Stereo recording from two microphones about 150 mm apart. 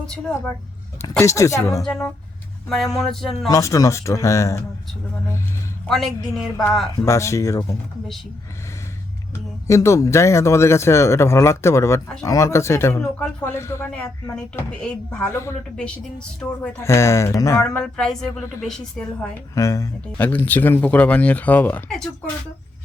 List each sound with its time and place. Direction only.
0.0 s a woman's voice: 5° left (ahead or behind)
1.2 s speech: 20° left (ahead or behind)
1.8 s a woman's voice: 5° left (ahead or behind)
3.5 s speech: 20° left (ahead or behind)
5.9 s a woman's voice: centre (ahead or behind)
6.9 s speech: 20° left (ahead or behind)
9.6 s speech: 20° left (ahead or behind)
15.3 s speech: 20° left (ahead or behind)
15.7 s a woman's voice: 5° left (ahead or behind)
16.8 s speech: 20° left (ahead or behind)
17.7 s a woman's voice: 5° left (ahead or behind)
19.5 s speech: 20° left (ahead or behind)
20.2 s speech: 10° left (ahead or behind)